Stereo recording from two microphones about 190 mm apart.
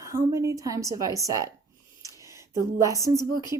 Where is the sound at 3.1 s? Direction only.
20° left (ahead or behind).